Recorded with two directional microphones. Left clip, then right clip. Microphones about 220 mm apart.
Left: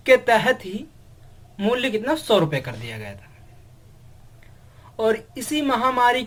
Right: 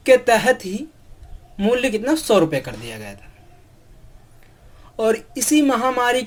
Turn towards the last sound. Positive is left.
turn(degrees=-50)  # may be behind; listen again after turning